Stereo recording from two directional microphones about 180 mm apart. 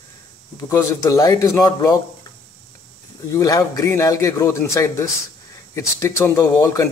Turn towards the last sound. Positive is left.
turn(degrees=15)  # may be behind; listen again after turning